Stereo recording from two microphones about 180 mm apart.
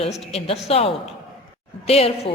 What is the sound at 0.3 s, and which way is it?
A woman's voice, 35° left (ahead or behind).